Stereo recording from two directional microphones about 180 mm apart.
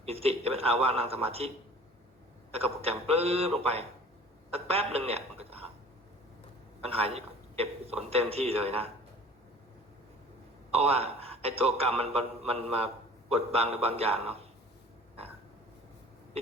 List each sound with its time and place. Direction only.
0.0 s a man's voice: 35° right (ahead or behind)
2.5 s a man's voice: 35° right (ahead or behind)
6.8 s a man's voice: 35° right (ahead or behind)
10.7 s a man's voice: 35° right (ahead or behind)